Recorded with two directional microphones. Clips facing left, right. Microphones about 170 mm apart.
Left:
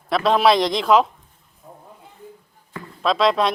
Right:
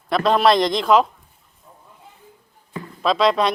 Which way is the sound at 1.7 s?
50° left (ahead or behind).